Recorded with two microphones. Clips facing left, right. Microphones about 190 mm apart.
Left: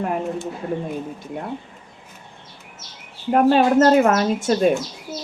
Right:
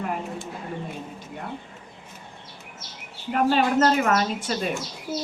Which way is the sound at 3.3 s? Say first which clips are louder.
Left 6 dB; 40° left (ahead or behind).